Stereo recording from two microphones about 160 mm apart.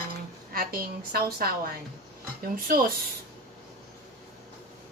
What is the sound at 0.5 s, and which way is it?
A woman's voice, 70° right (ahead or behind).